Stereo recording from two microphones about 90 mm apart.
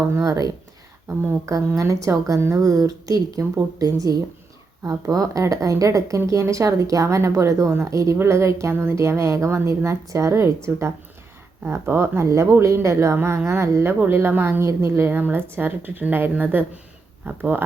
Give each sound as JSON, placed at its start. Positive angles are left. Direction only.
{"t": 0.1, "sound": "speech", "side_deg": -40}
{"t": 1.0, "sound": "speech", "side_deg": -25}
{"t": 1.5, "sound": "speech", "side_deg": -35}